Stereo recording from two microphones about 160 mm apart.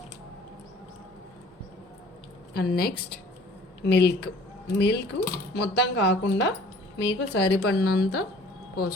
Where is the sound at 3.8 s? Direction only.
90° left.